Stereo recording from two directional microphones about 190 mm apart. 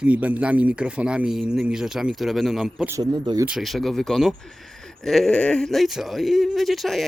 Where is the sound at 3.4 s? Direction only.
Centre (ahead or behind).